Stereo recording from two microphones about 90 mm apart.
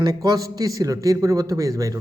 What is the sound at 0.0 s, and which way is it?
A man's voice, 45° right (ahead or behind).